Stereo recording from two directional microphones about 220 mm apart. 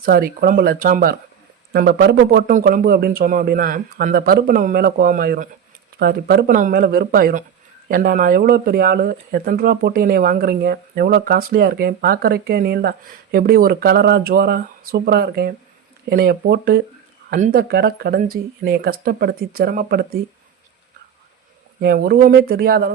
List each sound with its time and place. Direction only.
0.0 s speech: 40° right (ahead or behind)
21.8 s speech: 45° right (ahead or behind)